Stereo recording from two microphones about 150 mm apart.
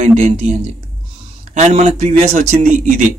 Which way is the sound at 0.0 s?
45° right (ahead or behind).